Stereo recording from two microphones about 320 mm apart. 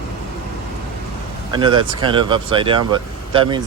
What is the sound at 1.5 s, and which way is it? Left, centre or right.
Speech, centre.